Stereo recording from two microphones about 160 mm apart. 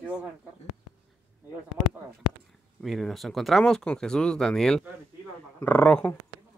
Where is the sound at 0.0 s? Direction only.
10° right (ahead or behind).